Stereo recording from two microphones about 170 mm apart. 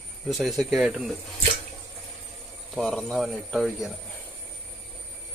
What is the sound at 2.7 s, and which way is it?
Speech, centre (ahead or behind).